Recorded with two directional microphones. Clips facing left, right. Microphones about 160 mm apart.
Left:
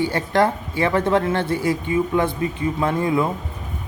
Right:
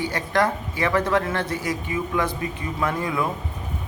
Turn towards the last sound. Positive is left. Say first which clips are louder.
# left 5 dB
turn(degrees=25)  # may be behind; listen again after turning